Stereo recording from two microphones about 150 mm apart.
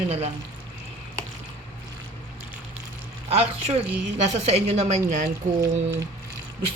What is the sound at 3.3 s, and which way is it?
Speech, 40° right (ahead or behind).